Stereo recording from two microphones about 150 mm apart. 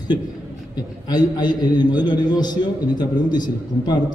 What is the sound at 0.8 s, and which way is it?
A man's voice, 25° left (ahead or behind).